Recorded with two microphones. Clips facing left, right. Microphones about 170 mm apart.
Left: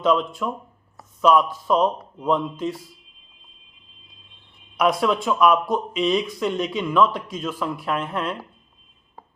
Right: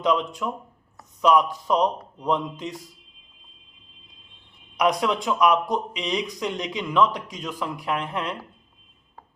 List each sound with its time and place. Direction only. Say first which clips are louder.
0.0 s speech: left 3 dB; 15° right (ahead or behind)
4.8 s speech: left 2 dB; 15° right (ahead or behind)